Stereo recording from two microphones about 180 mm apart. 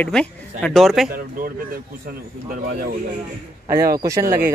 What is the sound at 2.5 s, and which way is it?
Speech, 50° right (ahead or behind).